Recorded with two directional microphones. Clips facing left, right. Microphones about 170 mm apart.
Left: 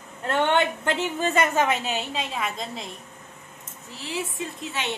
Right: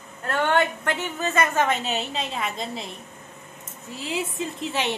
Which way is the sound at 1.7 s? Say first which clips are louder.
Right 1 dB; centre (ahead or behind).